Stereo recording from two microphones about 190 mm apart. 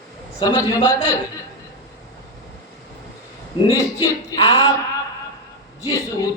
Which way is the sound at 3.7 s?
25° left (ahead or behind).